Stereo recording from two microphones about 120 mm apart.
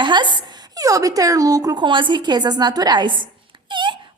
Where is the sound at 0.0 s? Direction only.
40° right (ahead or behind).